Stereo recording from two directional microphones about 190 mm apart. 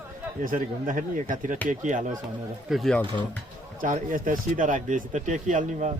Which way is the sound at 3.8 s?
45° right (ahead or behind).